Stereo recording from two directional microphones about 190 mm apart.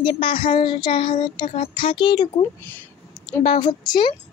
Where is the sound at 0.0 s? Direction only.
25° left (ahead or behind).